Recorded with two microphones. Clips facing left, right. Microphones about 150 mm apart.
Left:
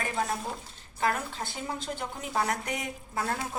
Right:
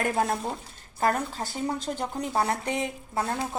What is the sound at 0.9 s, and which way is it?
A woman's voice, 40° right (ahead or behind).